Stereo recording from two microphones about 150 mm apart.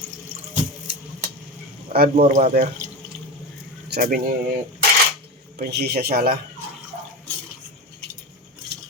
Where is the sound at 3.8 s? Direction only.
80° right.